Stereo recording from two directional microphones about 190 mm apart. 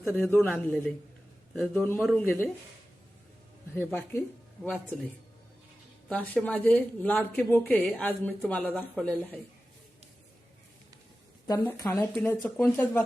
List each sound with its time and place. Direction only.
0.0 s speech: 10° left (ahead or behind)
1.5 s a man's voice: 5° left (ahead or behind)
3.8 s speech: 10° left (ahead or behind)
6.1 s speech: 5° left (ahead or behind)
11.4 s speech: 20° left (ahead or behind)